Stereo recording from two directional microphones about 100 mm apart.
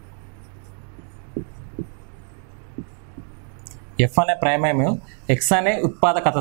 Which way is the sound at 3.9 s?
10° right (ahead or behind).